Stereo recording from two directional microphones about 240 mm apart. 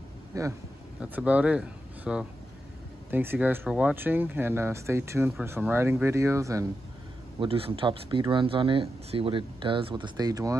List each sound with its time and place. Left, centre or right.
0.3 s speech: centre
7.3 s speech: right